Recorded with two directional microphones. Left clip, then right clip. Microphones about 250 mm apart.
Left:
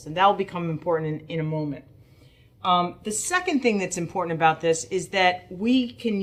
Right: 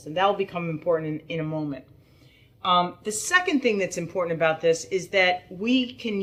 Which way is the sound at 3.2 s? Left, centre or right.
Left.